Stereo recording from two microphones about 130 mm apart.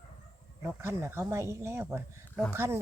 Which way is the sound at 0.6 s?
20° right (ahead or behind).